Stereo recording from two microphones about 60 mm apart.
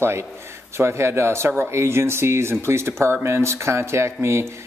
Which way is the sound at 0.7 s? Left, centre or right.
Right.